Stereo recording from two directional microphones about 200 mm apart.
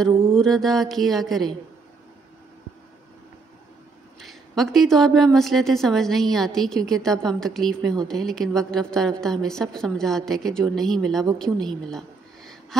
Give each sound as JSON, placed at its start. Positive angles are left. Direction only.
{"t": 0.1, "sound": "mantra", "side_deg": -25}
{"t": 0.4, "sound": "a woman's voice", "side_deg": 0}
{"t": 4.2, "sound": "a woman's voice", "side_deg": 0}